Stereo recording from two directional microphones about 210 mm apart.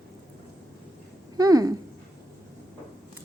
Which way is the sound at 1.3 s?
20° right (ahead or behind).